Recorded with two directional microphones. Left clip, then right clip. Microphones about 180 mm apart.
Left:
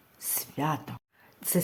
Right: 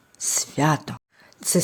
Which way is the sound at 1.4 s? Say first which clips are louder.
Right 10 dB; 15° right (ahead or behind).